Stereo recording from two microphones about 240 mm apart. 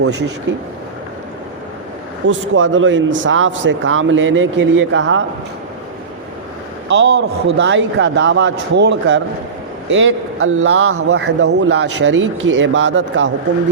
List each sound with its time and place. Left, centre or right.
2.2 s speech: right
6.8 s a man's voice: right
11.3 s speech: right